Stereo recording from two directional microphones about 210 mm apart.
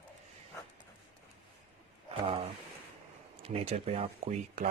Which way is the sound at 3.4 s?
30° right (ahead or behind).